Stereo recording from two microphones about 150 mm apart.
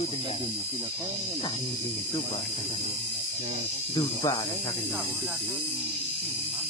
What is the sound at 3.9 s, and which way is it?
Speech, 35° left (ahead or behind).